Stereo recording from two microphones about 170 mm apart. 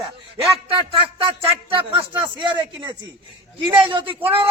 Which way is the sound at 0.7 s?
30° right (ahead or behind).